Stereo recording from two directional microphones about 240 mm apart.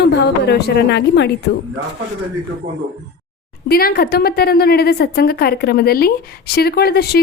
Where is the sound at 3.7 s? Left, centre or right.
Left.